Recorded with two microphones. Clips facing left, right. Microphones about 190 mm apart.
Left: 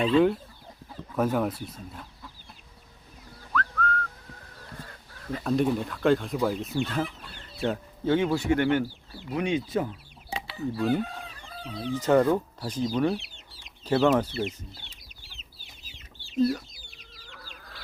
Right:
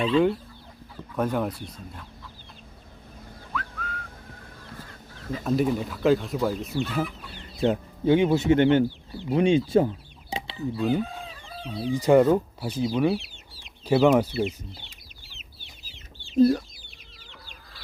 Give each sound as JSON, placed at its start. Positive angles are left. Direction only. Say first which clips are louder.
{"t": 0.0, "sound": "speech", "louder": "even", "side_deg": 0}
{"t": 3.5, "sound": "whistling", "louder": "left 6 dB", "side_deg": -10}
{"t": 5.3, "sound": "speech", "louder": "right 1 dB", "side_deg": -5}
{"t": 7.6, "sound": "speech", "louder": "right 5 dB", "side_deg": -15}
{"t": 10.7, "sound": "speech", "louder": "right 1 dB", "side_deg": 0}
{"t": 15.9, "sound": "chicken", "louder": "right 8 dB", "side_deg": -35}